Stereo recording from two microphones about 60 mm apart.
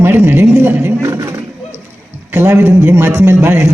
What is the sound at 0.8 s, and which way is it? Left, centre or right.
Roar, right.